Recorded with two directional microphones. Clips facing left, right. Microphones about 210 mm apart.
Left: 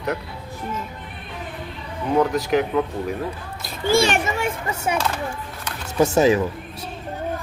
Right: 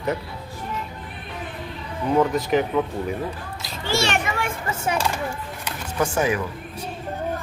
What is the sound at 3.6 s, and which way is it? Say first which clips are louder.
Children playing: left 6 dB; 50° left (ahead or behind).